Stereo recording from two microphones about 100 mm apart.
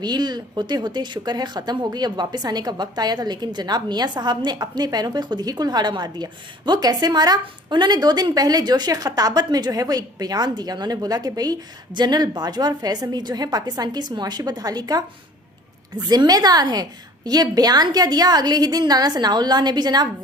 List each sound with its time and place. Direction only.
0.0 s speech: 45° right (ahead or behind)